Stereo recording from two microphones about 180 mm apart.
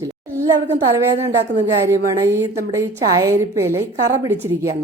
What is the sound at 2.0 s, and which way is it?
A woman's voice, 15° right (ahead or behind).